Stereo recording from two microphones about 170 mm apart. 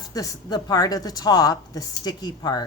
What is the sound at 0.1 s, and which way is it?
Speech, 20° left (ahead or behind).